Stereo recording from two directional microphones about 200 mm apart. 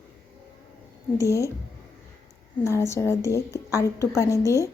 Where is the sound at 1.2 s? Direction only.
15° left (ahead or behind).